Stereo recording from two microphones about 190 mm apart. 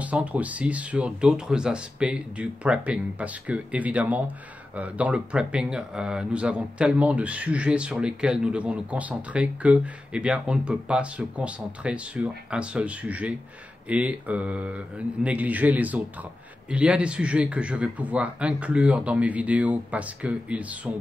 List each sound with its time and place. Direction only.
0.0 s speech: 5° right (ahead or behind)